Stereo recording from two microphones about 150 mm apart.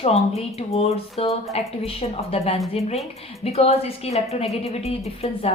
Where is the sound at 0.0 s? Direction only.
45° left (ahead or behind).